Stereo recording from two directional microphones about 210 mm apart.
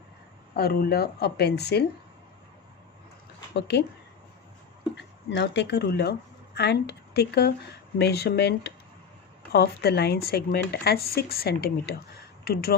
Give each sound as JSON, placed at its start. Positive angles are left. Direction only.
{"t": 0.5, "sound": "speech", "side_deg": 45}
{"t": 3.5, "sound": "speech", "side_deg": 55}
{"t": 5.3, "sound": "speech", "side_deg": 55}